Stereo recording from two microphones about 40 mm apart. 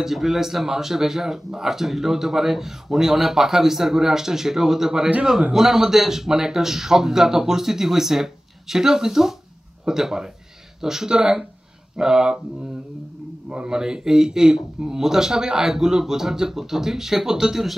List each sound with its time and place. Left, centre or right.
0.0 s speech: centre
13.5 s speech: centre